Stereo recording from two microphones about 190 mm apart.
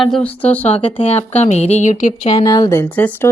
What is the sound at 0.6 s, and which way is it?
Speech, 35° left (ahead or behind).